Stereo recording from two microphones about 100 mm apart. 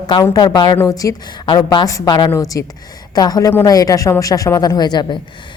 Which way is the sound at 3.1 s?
40° left (ahead or behind).